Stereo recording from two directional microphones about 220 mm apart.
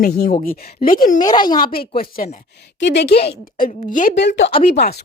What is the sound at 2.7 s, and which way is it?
Speech, 55° left (ahead or behind).